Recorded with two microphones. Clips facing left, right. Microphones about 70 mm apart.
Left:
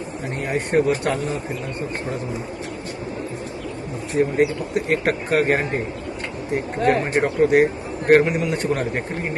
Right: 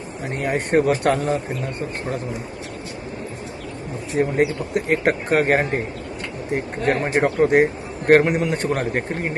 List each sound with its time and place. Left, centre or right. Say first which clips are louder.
0.3 s speech: right 1 dB; right
4.2 s speech: left 1 dB; right
6.8 s speech: even; right